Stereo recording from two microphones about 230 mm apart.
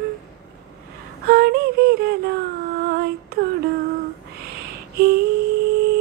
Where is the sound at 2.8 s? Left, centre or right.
Right.